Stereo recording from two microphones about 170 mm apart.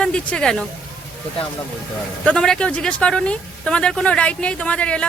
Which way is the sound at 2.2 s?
5° left (ahead or behind).